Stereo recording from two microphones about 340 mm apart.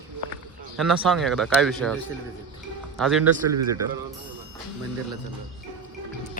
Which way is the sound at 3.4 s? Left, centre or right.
Right.